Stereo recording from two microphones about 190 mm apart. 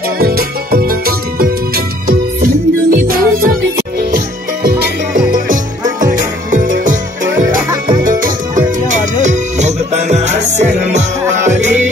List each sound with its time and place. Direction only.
0.2 s music: 55° right (ahead or behind)
2.9 s music: 50° right (ahead or behind)
4.6 s music: 55° right (ahead or behind)
8.0 s music: 45° right (ahead or behind)